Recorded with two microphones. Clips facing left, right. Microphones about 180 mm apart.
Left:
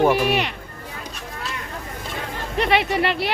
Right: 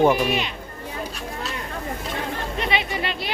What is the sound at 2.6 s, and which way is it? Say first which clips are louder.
Speech: left 7 dB; 65° left (ahead or behind).